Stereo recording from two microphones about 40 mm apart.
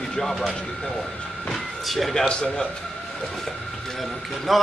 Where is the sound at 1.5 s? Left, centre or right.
Centre.